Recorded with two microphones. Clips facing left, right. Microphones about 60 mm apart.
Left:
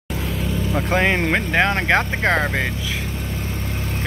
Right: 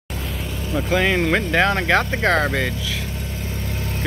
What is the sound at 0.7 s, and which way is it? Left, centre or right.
Speech, left.